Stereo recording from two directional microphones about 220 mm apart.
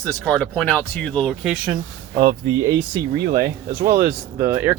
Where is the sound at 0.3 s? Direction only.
5° left (ahead or behind).